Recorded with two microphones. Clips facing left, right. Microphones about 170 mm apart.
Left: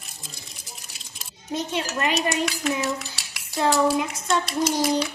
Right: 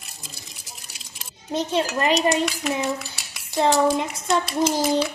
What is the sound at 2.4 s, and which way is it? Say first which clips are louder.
Cutlery: right 1 dB; centre (ahead or behind).